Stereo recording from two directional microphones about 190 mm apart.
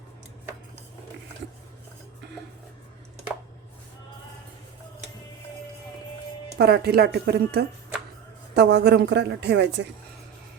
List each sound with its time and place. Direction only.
6.6 s a woman's voice: 60° right (ahead or behind)